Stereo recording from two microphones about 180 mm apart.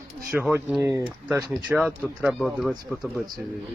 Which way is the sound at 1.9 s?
Centre (ahead or behind).